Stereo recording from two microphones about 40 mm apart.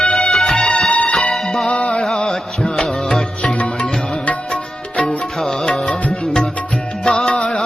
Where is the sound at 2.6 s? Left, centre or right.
Centre.